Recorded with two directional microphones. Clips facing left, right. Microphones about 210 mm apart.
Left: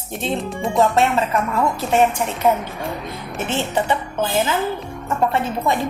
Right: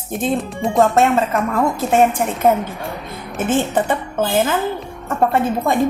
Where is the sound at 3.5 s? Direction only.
50° right (ahead or behind).